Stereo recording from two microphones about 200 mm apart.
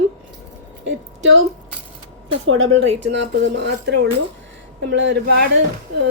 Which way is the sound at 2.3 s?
90° right.